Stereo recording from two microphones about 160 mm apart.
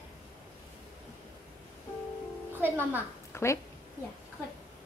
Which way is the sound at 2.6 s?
10° right (ahead or behind).